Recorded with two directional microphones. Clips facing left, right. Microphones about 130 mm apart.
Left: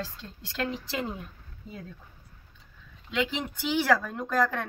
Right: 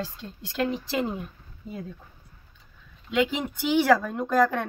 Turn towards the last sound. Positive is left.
turn(degrees=-15)  # may be behind; listen again after turning